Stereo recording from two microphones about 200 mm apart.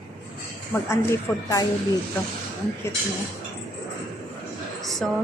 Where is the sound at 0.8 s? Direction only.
15° left (ahead or behind).